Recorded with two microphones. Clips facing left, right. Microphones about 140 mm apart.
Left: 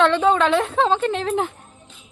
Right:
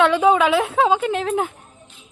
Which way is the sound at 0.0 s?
10° right (ahead or behind).